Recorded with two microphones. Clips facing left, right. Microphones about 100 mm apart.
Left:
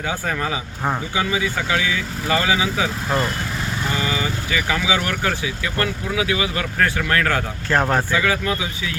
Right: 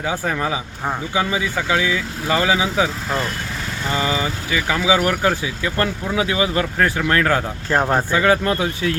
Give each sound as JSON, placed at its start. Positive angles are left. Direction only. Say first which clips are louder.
{"t": 0.3, "sound": "speech", "louder": "right 2 dB", "side_deg": -10}
{"t": 1.1, "sound": "speech", "louder": "right 1 dB", "side_deg": -25}
{"t": 3.9, "sound": "speech", "louder": "right 5 dB", "side_deg": -25}
{"t": 8.1, "sound": "speech", "louder": "right 4 dB", "side_deg": -40}